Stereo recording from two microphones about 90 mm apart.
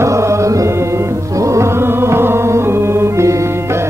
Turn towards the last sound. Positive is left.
turn(degrees=-30)  # may be behind; listen again after turning